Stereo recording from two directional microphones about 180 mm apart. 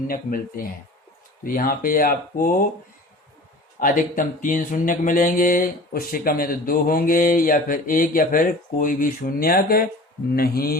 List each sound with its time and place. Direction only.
0.1 s speech: 50° left (ahead or behind)
3.8 s a man's voice: 50° left (ahead or behind)